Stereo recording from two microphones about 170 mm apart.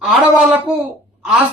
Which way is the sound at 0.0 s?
5° right (ahead or behind).